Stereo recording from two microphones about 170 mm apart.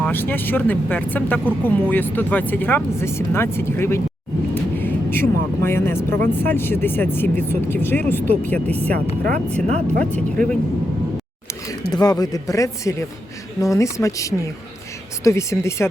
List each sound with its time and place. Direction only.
0.0 s speech: 10° left (ahead or behind)
9.2 s speech: 45° right (ahead or behind)
10.0 s speech: 5° left (ahead or behind)
11.9 s speech: 20° left (ahead or behind)